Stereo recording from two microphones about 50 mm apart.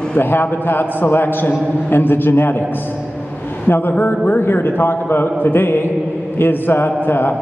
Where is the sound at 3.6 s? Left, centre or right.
Left.